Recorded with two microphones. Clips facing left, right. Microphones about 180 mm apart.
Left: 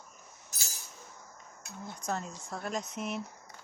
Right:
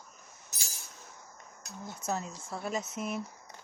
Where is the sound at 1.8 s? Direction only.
5° right (ahead or behind).